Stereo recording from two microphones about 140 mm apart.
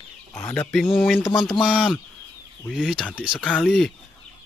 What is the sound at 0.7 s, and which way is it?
Speech, centre (ahead or behind).